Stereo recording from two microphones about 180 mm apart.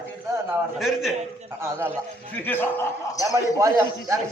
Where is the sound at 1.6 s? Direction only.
10° right (ahead or behind).